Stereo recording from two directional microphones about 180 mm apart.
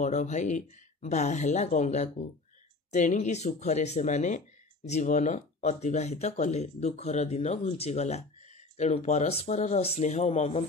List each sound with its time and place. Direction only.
0.0 s speech: 40° left (ahead or behind)